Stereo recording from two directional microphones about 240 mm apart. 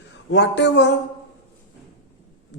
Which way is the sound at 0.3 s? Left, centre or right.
Left.